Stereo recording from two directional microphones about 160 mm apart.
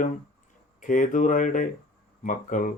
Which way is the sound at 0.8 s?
55° left (ahead or behind).